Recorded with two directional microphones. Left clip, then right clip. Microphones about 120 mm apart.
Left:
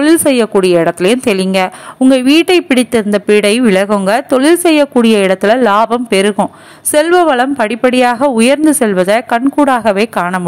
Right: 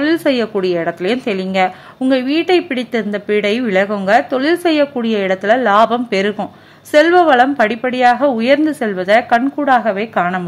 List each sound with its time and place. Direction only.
0.0 s a woman's voice: 45° left (ahead or behind)